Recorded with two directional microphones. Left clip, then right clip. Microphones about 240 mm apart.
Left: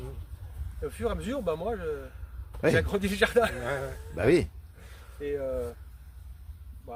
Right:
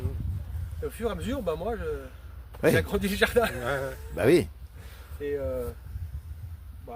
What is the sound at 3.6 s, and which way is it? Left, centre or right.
Speech, right.